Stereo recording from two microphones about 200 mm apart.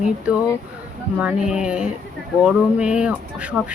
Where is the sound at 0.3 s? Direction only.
5° right (ahead or behind).